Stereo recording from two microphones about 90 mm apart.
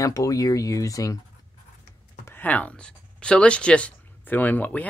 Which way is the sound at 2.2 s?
20° left (ahead or behind).